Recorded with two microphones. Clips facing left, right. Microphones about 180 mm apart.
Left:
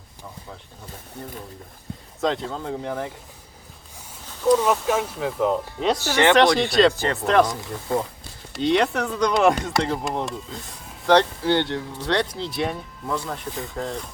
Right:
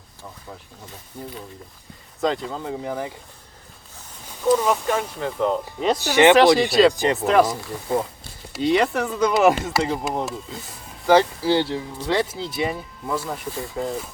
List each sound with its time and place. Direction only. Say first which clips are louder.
2.2 s speech: right 1 dB; centre (ahead or behind)
4.4 s speech: left 1 dB; 5° left (ahead or behind)
6.0 s speech: right 6 dB; 15° right (ahead or behind)
6.6 s speech: right 2 dB; centre (ahead or behind)
6.9 s speech: right 4 dB; 15° right (ahead or behind)
7.2 s speech: even; 5° right (ahead or behind)
8.5 s speech: right 1 dB; centre (ahead or behind)